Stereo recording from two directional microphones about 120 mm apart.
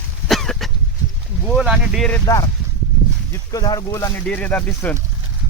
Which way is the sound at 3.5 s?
35° left (ahead or behind).